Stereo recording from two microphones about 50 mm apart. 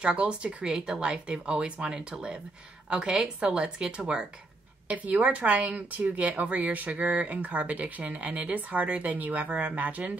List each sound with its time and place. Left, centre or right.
0.0 s speech: centre
4.8 s speech: right